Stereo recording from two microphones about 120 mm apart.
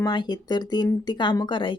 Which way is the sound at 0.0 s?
35° left (ahead or behind).